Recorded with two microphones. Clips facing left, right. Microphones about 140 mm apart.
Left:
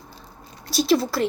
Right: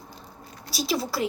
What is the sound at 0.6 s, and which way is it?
Speech, 5° right (ahead or behind).